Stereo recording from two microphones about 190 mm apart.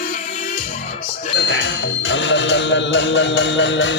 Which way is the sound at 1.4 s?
65° left (ahead or behind).